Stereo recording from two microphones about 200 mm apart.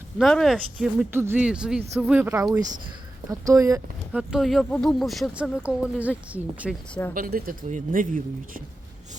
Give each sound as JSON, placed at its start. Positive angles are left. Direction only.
{"t": 0.2, "sound": "speech", "side_deg": 0}
{"t": 4.1, "sound": "speech", "side_deg": -5}
{"t": 7.1, "sound": "speech", "side_deg": -45}